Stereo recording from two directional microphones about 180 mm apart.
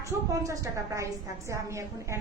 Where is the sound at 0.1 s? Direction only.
20° right (ahead or behind).